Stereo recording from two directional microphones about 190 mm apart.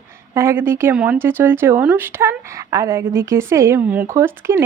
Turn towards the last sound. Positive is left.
turn(degrees=-15)  # may be behind; listen again after turning